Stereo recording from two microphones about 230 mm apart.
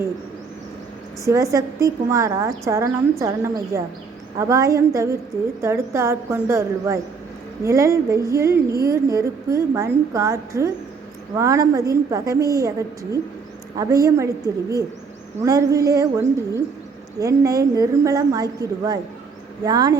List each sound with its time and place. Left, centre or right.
1.2 s speech: centre